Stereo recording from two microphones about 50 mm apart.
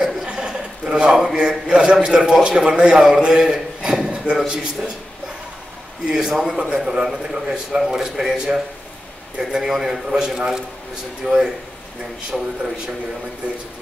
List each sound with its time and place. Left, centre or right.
0.0 s chuckle: centre
1.1 s a man's voice: centre
6.0 s a man's voice: centre
12.3 s speech: centre